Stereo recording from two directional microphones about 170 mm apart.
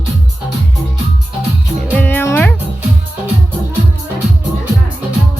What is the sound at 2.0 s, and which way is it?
Music, 10° left (ahead or behind).